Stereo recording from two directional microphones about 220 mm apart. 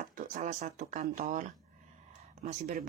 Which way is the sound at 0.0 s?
35° right (ahead or behind).